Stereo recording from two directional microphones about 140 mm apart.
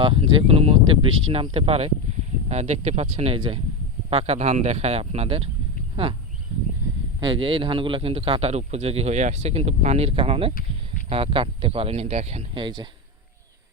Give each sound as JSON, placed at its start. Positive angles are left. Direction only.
{"t": 0.0, "sound": "a man's voice", "side_deg": -40}
{"t": 7.2, "sound": "a man's voice", "side_deg": -40}
{"t": 12.6, "sound": "a man's voice", "side_deg": -35}